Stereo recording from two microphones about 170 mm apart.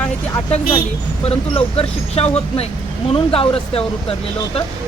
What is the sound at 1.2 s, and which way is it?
Speech, 35° left (ahead or behind).